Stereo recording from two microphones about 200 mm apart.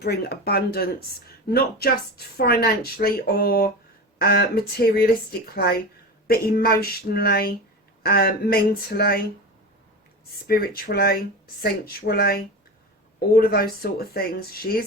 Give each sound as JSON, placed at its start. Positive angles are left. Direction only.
{"t": 0.0, "sound": "speech", "side_deg": 55}
{"t": 6.2, "sound": "speech", "side_deg": 50}
{"t": 10.4, "sound": "speech", "side_deg": 50}